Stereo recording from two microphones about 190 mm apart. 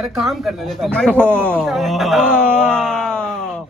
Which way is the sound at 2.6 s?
5° left (ahead or behind).